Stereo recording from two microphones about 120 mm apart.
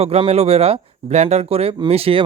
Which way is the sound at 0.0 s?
60° right (ahead or behind).